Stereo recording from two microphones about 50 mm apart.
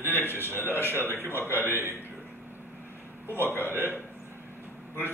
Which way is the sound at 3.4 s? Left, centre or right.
Right.